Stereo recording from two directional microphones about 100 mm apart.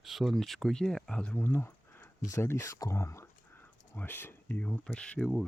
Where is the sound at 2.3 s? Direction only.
30° left (ahead or behind).